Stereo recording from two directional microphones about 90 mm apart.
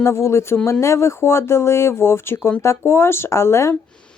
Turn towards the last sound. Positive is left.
turn(degrees=30)  # may be behind; listen again after turning